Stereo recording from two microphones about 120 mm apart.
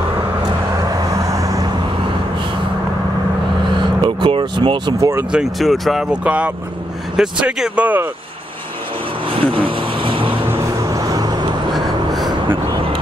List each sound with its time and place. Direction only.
0.7 s vehicle: 30° right (ahead or behind)
4.0 s vehicle: 50° right (ahead or behind)
5.3 s speech: centre (ahead or behind)
9.4 s vehicle: 50° right (ahead or behind)
10.5 s vehicle: 30° right (ahead or behind)
11.7 s a sound: centre (ahead or behind)
12.3 s vehicle: 40° right (ahead or behind)